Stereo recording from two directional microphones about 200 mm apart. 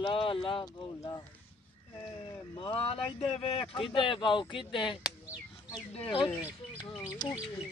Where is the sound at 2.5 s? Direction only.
25° left (ahead or behind).